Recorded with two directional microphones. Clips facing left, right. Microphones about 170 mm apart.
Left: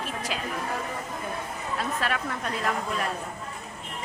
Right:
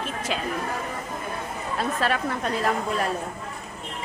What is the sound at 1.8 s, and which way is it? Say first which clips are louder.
Speech: right 5 dB; 30° right (ahead or behind).